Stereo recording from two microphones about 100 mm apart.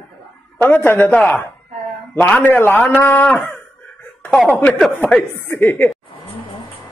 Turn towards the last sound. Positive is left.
turn(degrees=20)  # may be behind; listen again after turning